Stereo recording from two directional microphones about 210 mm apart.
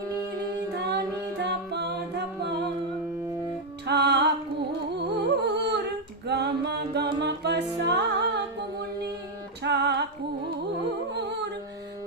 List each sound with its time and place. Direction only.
0.9 s music: 50° right (ahead or behind)
3.8 s music: 55° right (ahead or behind)
9.6 s music: 55° right (ahead or behind)
11.1 s music: 55° right (ahead or behind)